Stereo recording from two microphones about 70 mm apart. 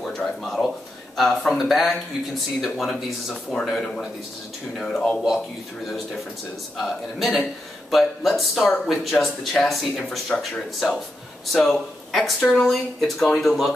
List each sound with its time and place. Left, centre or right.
0.0 s a sound: centre
1.1 s speech: centre
6.8 s speech: centre
12.4 s a woman's voice: left
12.6 s speech: centre